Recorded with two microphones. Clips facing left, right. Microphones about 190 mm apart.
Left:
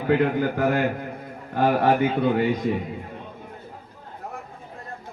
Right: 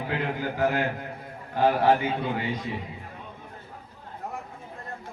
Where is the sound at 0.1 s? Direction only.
55° left (ahead or behind).